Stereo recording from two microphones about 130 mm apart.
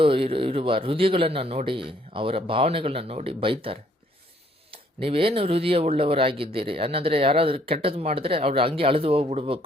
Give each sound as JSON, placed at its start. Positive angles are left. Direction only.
{"t": 0.0, "sound": "speech", "side_deg": -45}